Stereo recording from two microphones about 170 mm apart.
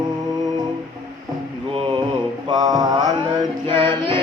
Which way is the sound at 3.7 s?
30° right (ahead or behind).